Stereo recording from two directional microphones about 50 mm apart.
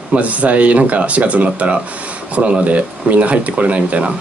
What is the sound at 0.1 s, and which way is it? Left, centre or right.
Speech, right.